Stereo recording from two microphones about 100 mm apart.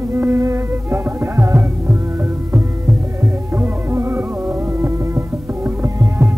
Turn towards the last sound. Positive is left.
turn(degrees=-25)  # may be behind; listen again after turning